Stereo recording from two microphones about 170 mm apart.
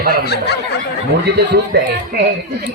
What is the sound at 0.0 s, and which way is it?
Speech, 65° right (ahead or behind).